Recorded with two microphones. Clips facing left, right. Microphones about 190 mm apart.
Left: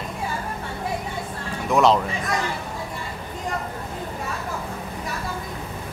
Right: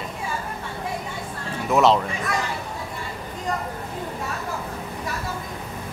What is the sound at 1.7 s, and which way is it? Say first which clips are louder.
Speech: even; centre (ahead or behind).